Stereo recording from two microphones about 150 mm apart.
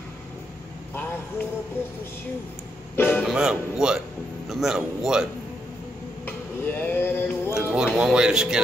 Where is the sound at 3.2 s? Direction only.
5° right (ahead or behind).